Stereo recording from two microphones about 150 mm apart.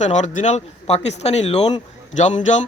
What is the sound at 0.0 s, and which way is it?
Speech, 50° left (ahead or behind).